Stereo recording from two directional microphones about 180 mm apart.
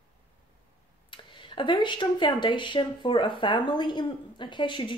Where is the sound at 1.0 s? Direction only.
25° left (ahead or behind).